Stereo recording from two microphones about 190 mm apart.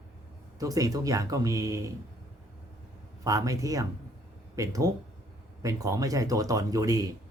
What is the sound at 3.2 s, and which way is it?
Speech, 20° right (ahead or behind).